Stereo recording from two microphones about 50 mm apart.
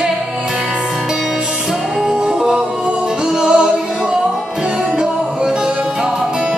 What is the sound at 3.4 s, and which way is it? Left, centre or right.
Music, centre.